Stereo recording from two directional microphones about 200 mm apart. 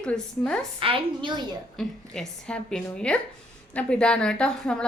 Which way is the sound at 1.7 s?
5° left (ahead or behind).